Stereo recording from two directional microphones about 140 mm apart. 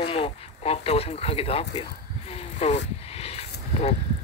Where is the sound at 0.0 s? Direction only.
40° left (ahead or behind).